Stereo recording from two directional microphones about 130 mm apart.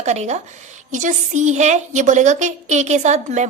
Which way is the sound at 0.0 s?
60° right (ahead or behind).